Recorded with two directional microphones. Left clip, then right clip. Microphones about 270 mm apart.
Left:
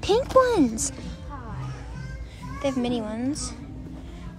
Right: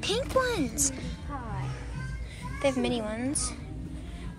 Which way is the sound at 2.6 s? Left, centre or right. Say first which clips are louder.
Left 1 dB; centre.